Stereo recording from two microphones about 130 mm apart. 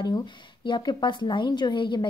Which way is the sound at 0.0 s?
35° left (ahead or behind).